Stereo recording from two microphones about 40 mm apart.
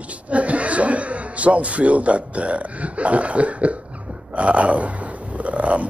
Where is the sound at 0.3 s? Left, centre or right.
Right.